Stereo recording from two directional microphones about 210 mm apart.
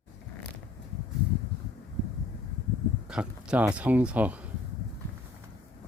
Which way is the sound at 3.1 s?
5° right (ahead or behind).